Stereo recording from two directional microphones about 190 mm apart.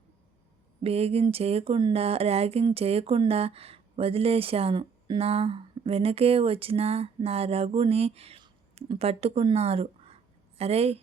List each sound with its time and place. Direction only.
0.8 s speech: 30° right (ahead or behind)